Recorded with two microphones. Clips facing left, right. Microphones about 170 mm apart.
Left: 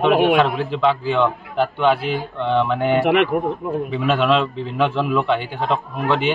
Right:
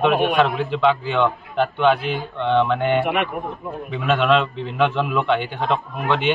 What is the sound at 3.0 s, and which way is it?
Speech, 80° left.